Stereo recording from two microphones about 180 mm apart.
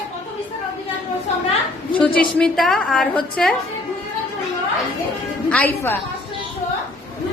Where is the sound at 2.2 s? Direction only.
Centre (ahead or behind).